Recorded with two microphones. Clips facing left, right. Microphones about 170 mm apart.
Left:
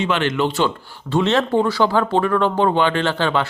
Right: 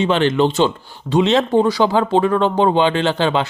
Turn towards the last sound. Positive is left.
turn(degrees=-20)  # may be behind; listen again after turning